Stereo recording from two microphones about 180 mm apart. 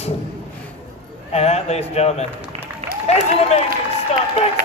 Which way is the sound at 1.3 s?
35° left (ahead or behind).